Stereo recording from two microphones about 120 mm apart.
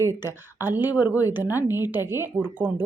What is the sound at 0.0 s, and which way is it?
A woman's voice, 20° right (ahead or behind).